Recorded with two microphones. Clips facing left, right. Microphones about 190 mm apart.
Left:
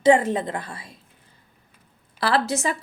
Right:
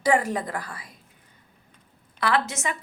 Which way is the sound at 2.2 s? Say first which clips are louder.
Left 3 dB; 35° left (ahead or behind).